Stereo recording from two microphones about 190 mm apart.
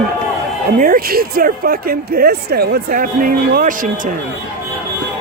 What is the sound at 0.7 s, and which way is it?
Speech, 45° right (ahead or behind).